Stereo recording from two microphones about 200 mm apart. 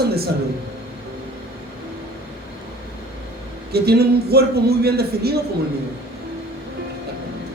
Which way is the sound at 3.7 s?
50° right (ahead or behind).